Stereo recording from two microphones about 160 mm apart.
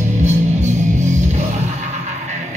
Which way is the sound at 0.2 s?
45° right (ahead or behind).